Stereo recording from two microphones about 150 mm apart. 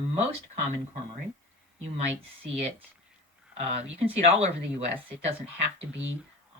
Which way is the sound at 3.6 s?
45° right (ahead or behind).